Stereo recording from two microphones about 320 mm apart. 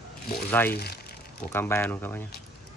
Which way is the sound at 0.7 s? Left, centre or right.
Left.